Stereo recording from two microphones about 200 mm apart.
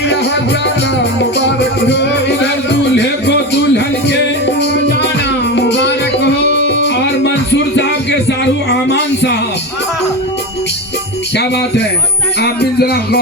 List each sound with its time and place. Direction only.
0.9 s music: 60° left (ahead or behind)
11.3 s music: 60° left (ahead or behind)